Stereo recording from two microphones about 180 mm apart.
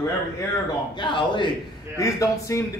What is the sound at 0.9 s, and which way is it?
A man's voice, 25° left (ahead or behind).